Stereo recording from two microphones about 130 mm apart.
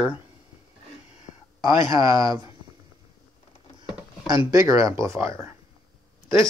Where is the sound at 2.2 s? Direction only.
30° right (ahead or behind).